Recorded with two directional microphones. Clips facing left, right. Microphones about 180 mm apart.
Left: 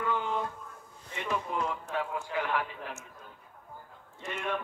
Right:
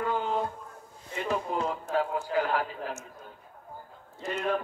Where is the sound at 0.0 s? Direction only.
35° right (ahead or behind).